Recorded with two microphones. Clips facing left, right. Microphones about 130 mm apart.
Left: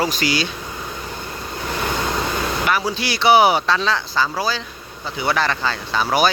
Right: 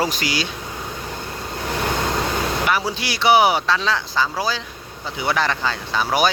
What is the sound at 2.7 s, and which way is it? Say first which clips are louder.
Speech: left 1 dB; 10° right (ahead or behind).